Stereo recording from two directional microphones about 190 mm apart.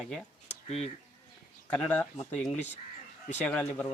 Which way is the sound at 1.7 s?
10° left (ahead or behind).